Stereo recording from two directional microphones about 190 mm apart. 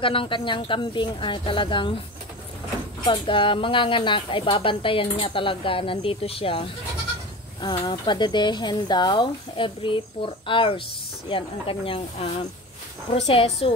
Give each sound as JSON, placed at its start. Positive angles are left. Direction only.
{"t": 0.0, "sound": "speech", "side_deg": 25}
{"t": 3.1, "sound": "speech", "side_deg": 25}